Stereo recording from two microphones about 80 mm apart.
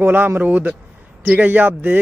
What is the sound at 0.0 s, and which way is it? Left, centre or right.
Speech, right.